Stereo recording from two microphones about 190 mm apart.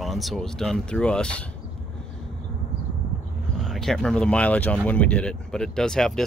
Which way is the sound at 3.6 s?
Centre (ahead or behind).